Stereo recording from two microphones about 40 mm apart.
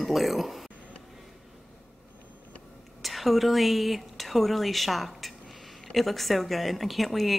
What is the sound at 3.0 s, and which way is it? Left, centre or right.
A woman's voice, centre.